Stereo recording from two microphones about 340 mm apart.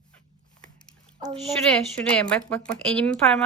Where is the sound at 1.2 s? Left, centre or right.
Centre.